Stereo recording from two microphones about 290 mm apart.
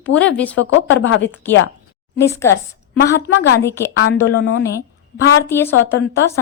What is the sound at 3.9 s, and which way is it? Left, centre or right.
Speech, left.